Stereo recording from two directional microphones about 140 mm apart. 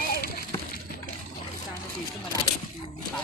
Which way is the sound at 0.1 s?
90° left.